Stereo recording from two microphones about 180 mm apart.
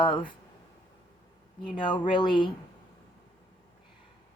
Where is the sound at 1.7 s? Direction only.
25° left (ahead or behind).